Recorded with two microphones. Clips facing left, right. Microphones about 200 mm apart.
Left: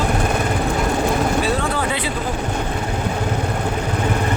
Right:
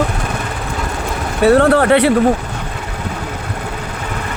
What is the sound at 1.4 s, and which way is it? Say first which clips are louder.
Speech: right 11 dB; 65° right (ahead or behind).